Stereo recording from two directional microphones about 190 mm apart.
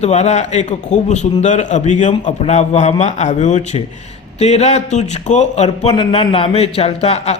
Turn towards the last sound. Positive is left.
turn(degrees=35)  # may be behind; listen again after turning